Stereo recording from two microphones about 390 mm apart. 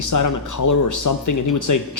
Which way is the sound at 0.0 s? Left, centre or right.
Left.